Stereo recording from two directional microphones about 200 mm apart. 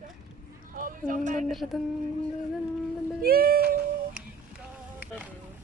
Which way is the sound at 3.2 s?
50° right (ahead or behind).